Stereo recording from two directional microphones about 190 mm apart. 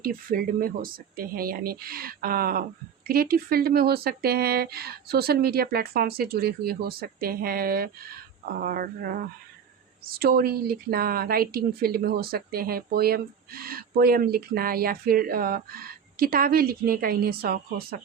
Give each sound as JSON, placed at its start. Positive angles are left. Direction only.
{"t": 0.0, "sound": "speech", "side_deg": -50}